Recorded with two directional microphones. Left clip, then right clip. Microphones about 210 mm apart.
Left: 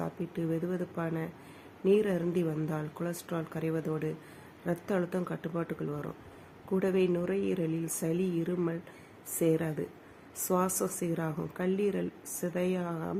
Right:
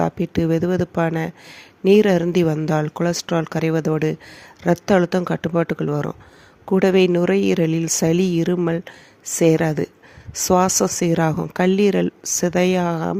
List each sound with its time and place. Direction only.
0.0 s speech: 50° right (ahead or behind)